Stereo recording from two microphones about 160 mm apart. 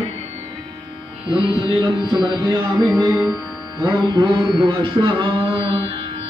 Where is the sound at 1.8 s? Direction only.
30° right (ahead or behind).